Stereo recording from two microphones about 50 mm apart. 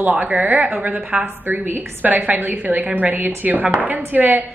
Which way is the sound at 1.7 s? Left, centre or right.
Right.